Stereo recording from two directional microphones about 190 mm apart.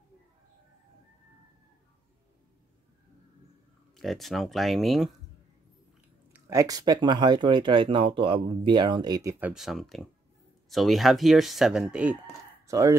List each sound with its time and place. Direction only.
3.9 s speech: centre (ahead or behind)
6.3 s speech: 15° right (ahead or behind)
9.5 s speech: centre (ahead or behind)
12.6 s speech: 15° right (ahead or behind)